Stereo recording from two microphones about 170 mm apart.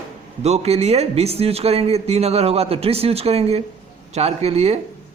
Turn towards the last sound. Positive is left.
turn(degrees=-40)  # may be behind; listen again after turning